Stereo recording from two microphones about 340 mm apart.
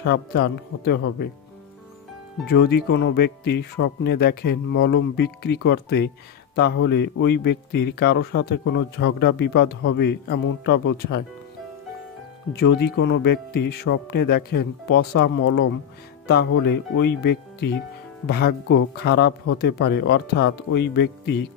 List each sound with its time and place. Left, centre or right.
0.0 s speech: left
2.4 s speech: left
12.5 s speech: left